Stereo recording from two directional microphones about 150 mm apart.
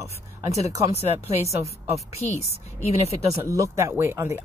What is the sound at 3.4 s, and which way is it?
Speech, 20° right (ahead or behind).